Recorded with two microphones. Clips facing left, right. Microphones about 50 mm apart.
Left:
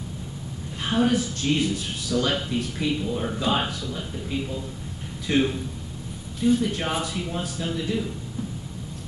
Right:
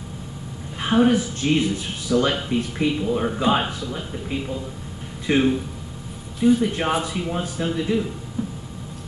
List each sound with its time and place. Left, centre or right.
0.8 s speech: centre